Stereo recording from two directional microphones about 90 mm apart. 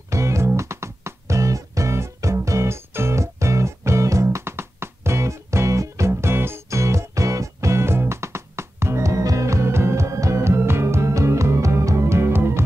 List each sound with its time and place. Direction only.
0.1 s music: 35° right (ahead or behind)